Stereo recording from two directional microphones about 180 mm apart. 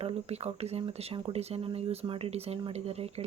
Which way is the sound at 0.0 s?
35° right (ahead or behind).